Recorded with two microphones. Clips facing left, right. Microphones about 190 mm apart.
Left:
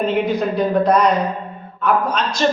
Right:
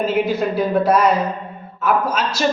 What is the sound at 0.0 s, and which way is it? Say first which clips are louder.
A man's voice: even; 5° right (ahead or behind).